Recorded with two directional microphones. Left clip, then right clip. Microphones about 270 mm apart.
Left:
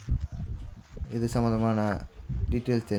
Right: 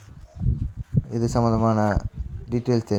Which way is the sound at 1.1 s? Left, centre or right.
Centre.